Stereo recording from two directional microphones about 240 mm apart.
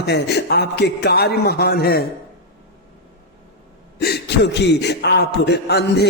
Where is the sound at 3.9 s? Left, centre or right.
Left.